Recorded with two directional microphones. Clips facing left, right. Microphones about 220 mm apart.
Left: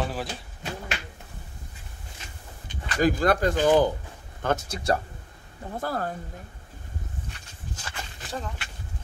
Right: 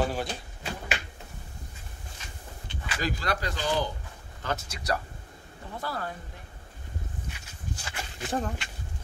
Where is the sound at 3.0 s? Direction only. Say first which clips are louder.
Left 10 dB; 50° left (ahead or behind).